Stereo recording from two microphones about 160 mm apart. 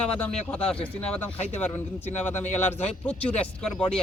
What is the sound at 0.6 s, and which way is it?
Speech, 35° left (ahead or behind).